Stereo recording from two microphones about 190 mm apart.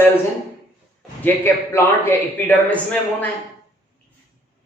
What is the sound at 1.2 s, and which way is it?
A man's voice, 10° left (ahead or behind).